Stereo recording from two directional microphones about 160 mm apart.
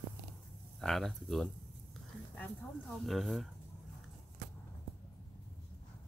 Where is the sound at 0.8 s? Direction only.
Centre (ahead or behind).